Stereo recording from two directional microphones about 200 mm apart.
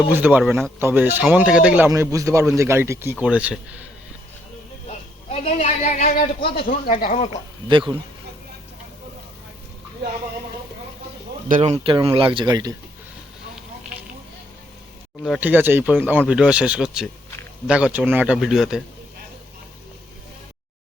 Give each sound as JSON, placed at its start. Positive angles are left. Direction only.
{"t": 0.1, "sound": "speech", "side_deg": -10}
{"t": 1.9, "sound": "speech", "side_deg": -15}
{"t": 4.9, "sound": "speech", "side_deg": 35}
{"t": 7.7, "sound": "speech", "side_deg": -25}
{"t": 11.4, "sound": "speech", "side_deg": -35}
{"t": 15.2, "sound": "a man's voice", "side_deg": -5}